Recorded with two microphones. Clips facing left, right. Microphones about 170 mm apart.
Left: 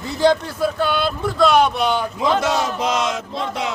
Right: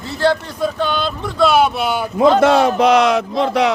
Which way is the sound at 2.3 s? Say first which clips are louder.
Right 8 dB; 55° right (ahead or behind).